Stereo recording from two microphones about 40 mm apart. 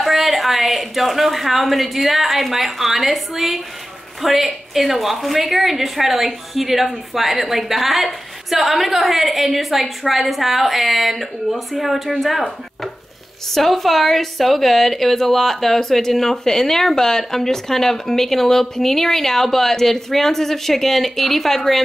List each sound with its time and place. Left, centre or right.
0.0 s a woman's voice: centre